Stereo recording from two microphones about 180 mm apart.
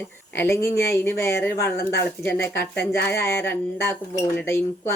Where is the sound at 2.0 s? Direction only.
10° left (ahead or behind).